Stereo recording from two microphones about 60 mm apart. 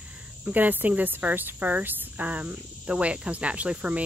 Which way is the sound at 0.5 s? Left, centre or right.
Right.